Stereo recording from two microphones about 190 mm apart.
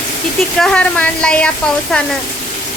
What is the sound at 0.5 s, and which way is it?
Speech, 5° left (ahead or behind).